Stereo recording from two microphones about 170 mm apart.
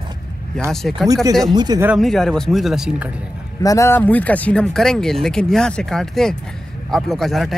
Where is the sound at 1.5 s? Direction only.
25° right (ahead or behind).